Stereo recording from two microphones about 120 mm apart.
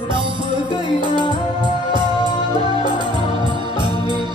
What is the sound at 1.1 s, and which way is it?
Music, 40° left (ahead or behind).